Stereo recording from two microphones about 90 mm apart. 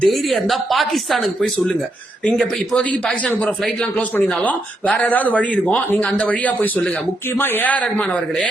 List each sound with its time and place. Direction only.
0.0 s speech: centre (ahead or behind)
2.2 s speech: 15° left (ahead or behind)
4.4 s speech: 15° left (ahead or behind)